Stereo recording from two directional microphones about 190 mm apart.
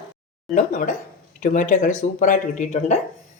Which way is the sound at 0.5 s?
45° left (ahead or behind).